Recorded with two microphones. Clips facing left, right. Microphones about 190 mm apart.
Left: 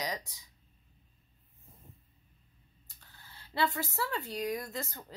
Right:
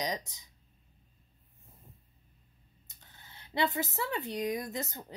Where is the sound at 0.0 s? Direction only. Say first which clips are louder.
Right 2 dB; 20° right (ahead or behind).